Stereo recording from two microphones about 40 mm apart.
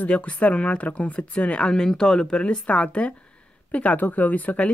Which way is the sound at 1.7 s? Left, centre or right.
Centre.